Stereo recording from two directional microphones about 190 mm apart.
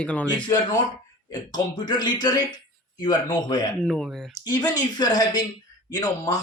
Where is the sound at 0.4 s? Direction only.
20° left (ahead or behind).